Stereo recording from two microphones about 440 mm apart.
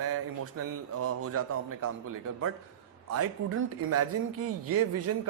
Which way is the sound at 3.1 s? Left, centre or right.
Right.